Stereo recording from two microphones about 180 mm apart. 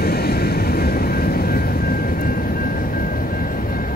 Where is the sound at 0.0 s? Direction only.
60° left (ahead or behind).